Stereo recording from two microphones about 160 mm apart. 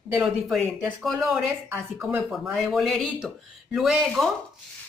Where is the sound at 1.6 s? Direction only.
15° right (ahead or behind).